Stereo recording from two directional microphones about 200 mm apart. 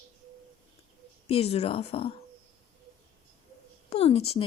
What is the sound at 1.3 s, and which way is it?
Speech, 30° left (ahead or behind).